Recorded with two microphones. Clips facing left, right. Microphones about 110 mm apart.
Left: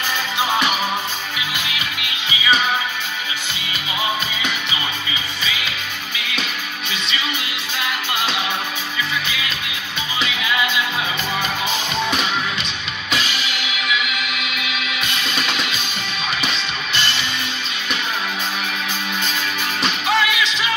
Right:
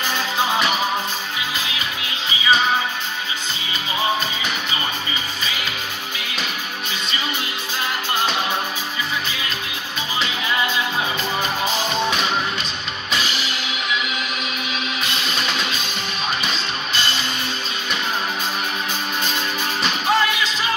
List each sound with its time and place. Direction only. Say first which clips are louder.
14.0 s music: left 1 dB; 35° right (ahead or behind)
20.2 s music: left 1 dB; 40° right (ahead or behind)